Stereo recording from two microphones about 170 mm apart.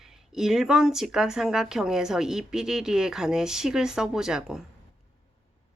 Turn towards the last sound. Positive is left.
turn(degrees=-5)  # may be behind; listen again after turning